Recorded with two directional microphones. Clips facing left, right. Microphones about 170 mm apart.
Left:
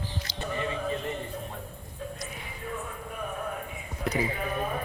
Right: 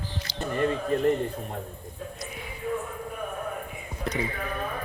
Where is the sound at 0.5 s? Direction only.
50° right (ahead or behind).